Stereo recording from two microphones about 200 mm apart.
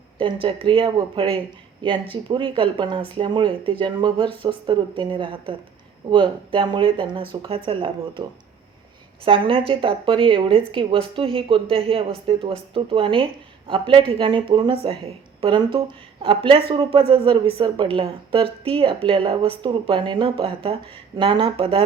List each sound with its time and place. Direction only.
0.2 s a woman's voice: 25° right (ahead or behind)